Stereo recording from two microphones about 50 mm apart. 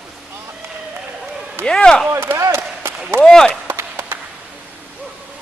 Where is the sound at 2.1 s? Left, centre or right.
Right.